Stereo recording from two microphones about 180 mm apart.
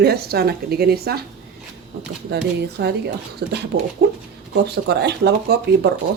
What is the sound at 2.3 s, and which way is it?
A woman's voice, 65° right (ahead or behind).